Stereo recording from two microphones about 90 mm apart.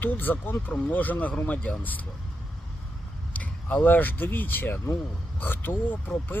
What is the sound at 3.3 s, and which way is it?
Speech, 15° left (ahead or behind).